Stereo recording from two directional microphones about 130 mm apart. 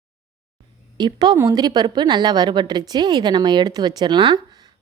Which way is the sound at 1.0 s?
35° right (ahead or behind).